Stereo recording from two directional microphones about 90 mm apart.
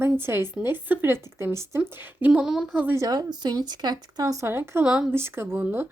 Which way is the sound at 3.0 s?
45° right (ahead or behind).